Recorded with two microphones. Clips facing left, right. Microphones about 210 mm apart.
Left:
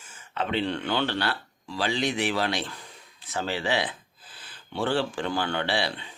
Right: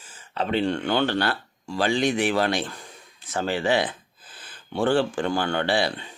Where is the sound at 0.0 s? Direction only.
30° right (ahead or behind).